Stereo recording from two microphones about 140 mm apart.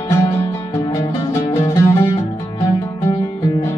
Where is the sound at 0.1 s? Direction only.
20° left (ahead or behind).